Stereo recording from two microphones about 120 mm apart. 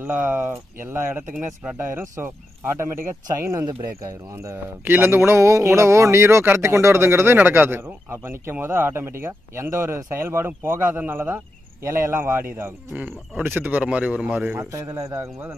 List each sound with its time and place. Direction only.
0.0 s a man's voice: 15° right (ahead or behind)